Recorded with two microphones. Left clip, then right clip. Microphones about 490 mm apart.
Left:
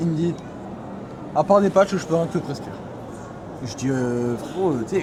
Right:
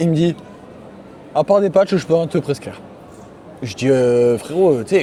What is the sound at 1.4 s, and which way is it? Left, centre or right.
Speech, right.